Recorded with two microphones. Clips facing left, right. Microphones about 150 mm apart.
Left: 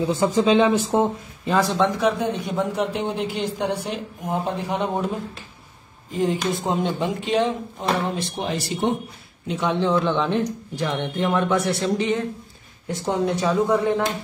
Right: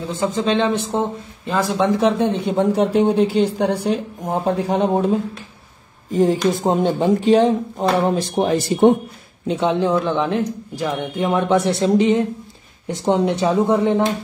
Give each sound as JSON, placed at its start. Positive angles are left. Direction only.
{"t": 0.2, "sound": "a man's voice", "side_deg": 10}
{"t": 1.8, "sound": "speech", "side_deg": -25}
{"t": 6.1, "sound": "speech", "side_deg": -40}
{"t": 9.5, "sound": "speech", "side_deg": -25}
{"t": 9.8, "sound": "speech", "side_deg": -15}
{"t": 10.0, "sound": "speech", "side_deg": -5}